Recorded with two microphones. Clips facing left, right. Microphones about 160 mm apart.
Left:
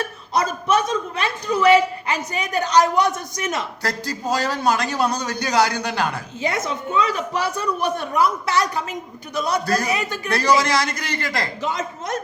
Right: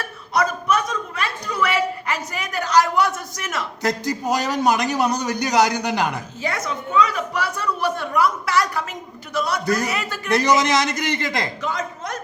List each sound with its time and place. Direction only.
0.3 s a woman's voice: 25° left (ahead or behind)
3.8 s a man's voice: 20° right (ahead or behind)
6.4 s a woman's voice: 20° left (ahead or behind)
10.2 s a man's voice: 20° right (ahead or behind)
11.6 s a woman's voice: 25° left (ahead or behind)